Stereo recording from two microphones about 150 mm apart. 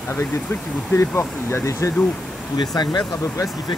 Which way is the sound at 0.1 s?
15° left (ahead or behind).